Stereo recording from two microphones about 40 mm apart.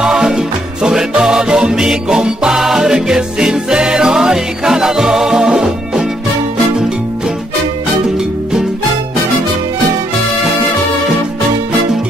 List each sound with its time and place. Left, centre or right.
0.0 s music: centre